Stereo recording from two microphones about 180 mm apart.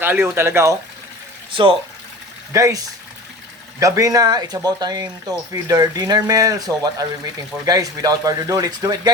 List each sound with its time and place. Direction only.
0.0 s speech: 10° right (ahead or behind)
2.5 s speech: 15° right (ahead or behind)